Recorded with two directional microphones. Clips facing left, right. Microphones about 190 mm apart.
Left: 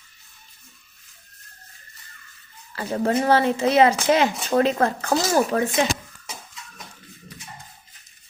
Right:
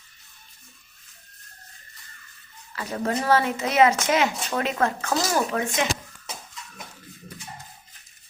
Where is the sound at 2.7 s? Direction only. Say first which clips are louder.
Left 5 dB; 30° left (ahead or behind).